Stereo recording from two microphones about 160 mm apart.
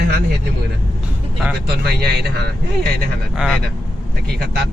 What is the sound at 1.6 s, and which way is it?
Speech, 90° right.